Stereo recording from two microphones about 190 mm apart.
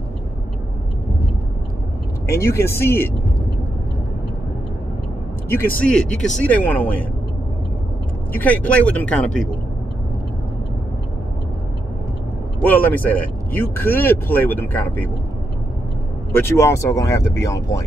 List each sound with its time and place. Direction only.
2.2 s speech: 15° left (ahead or behind)
5.8 s speech: 5° left (ahead or behind)
8.3 s speech: 10° left (ahead or behind)
12.6 s speech: 10° left (ahead or behind)
16.3 s speech: 10° left (ahead or behind)